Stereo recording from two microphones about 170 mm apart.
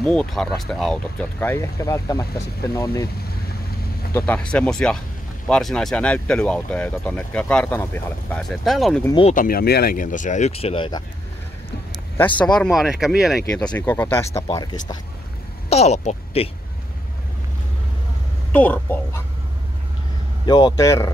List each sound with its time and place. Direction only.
0.0 s speech: 5° left (ahead or behind)
1.4 s speech: 15° left (ahead or behind)
4.1 s speech: 5° left (ahead or behind)
9.3 s speech: 55° left (ahead or behind); by 11.0 s 30° left (ahead or behind)
12.4 s speech: 5° left (ahead or behind)
13.6 s speech: 10° left (ahead or behind); by 15.0 s 25° left (ahead or behind)
15.7 s speech: 40° left (ahead or behind)
18.5 s speech: 10° left (ahead or behind)
20.4 s speech: 25° left (ahead or behind)